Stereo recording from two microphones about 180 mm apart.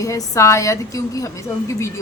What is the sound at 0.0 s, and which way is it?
A woman's voice, 15° left (ahead or behind).